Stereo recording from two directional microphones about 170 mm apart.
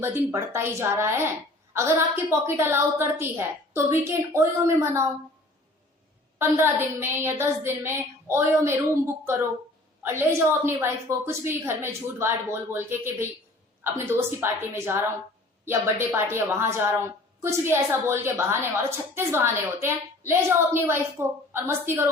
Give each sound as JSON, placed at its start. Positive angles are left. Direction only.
{"t": 0.0, "sound": "a woman's voice", "side_deg": -15}
{"t": 6.4, "sound": "a woman's voice", "side_deg": -15}